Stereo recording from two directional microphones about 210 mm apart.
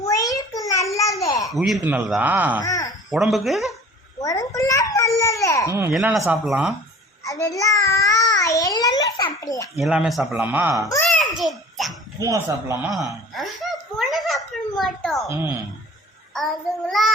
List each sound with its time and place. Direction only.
0.0 s a sound: 15° left (ahead or behind)
1.2 s babbling: 15° left (ahead or behind)
1.5 s speech: centre (ahead or behind)
2.6 s groan: 15° left (ahead or behind)
3.1 s speech: centre (ahead or behind)
4.2 s babbling: 15° left (ahead or behind)
5.9 s speech: 5° right (ahead or behind)
7.3 s child singing: 15° left (ahead or behind)
9.7 s speech: centre (ahead or behind)
10.8 s babbling: 15° left (ahead or behind)
11.2 s babbling: centre (ahead or behind)
12.2 s speech: 15° right (ahead or behind)
13.1 s a sound: centre (ahead or behind)
16.3 s child singing: centre (ahead or behind)